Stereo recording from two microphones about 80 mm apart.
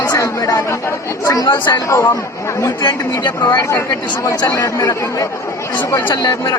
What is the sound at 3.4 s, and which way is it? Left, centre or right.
A man's voice, left.